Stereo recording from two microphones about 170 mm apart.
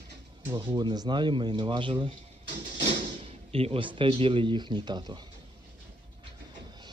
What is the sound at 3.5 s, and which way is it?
Speech, 35° right (ahead or behind).